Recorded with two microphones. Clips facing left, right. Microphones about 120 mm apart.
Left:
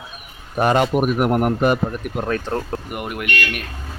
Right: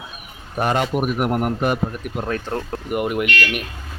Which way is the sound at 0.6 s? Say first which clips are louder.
Left 3 dB; 90° left.